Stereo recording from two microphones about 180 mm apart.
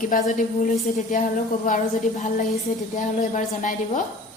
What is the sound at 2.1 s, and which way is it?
A woman's voice, 40° left (ahead or behind).